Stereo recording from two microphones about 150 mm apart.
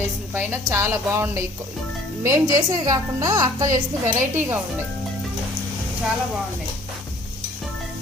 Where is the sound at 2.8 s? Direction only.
20° right (ahead or behind).